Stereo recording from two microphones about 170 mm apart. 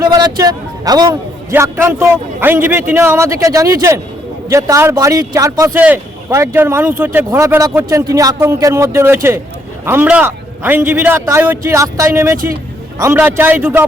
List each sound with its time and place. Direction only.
0.0 s a man's voice: 20° right (ahead or behind)